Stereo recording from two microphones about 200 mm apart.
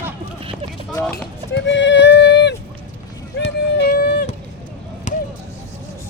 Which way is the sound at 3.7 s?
50° left (ahead or behind).